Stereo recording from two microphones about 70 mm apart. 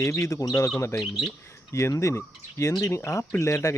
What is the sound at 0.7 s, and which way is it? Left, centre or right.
Speech, left.